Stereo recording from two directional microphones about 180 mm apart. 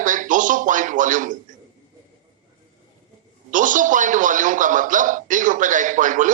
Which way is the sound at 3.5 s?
45° right (ahead or behind).